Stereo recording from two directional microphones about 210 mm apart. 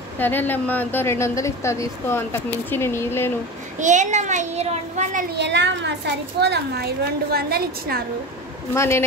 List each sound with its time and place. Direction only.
0.2 s a woman's voice: 10° left (ahead or behind)
3.8 s a child's voice: 35° right (ahead or behind)
5.3 s a woman's voice: 55° right (ahead or behind)
8.7 s a woman's voice: 15° left (ahead or behind)